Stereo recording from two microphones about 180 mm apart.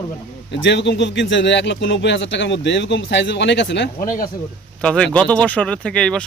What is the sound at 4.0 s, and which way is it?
Speech, 50° left (ahead or behind).